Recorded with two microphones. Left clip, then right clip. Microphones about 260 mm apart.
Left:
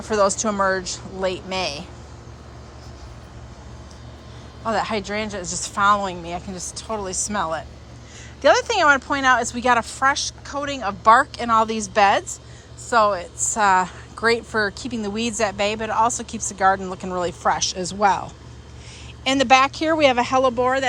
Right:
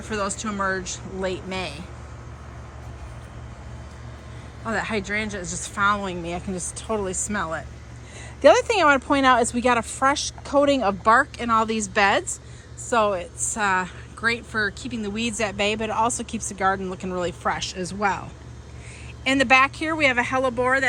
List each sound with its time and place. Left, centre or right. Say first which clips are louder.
0.1 s a woman's voice: left 8 dB; centre
4.6 s a woman's voice: left 3 dB; centre
5.5 s a woman's voice: left 4 dB; left
5.7 s a woman's voice: left 4 dB; centre